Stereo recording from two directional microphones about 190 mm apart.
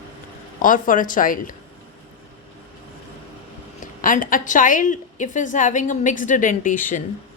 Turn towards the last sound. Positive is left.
turn(degrees=45)  # may be behind; listen again after turning